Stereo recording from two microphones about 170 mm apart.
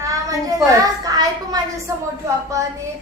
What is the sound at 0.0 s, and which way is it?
Child singing, 20° right (ahead or behind).